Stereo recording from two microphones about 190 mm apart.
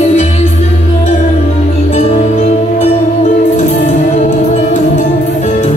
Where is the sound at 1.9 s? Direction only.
35° left (ahead or behind).